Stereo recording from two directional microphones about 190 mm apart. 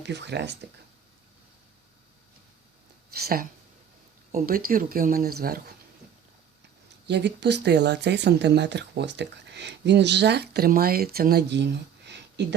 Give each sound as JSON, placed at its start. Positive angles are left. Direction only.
{"t": 0.0, "sound": "speech", "side_deg": -65}
{"t": 3.1, "sound": "speech", "side_deg": -55}
{"t": 7.1, "sound": "speech", "side_deg": -65}